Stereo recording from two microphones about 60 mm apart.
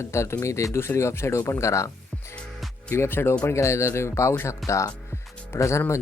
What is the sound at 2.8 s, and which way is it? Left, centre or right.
Speech, left.